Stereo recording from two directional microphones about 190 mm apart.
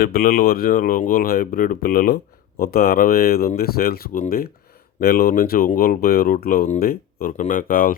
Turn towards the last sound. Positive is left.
turn(degrees=50)  # may be behind; listen again after turning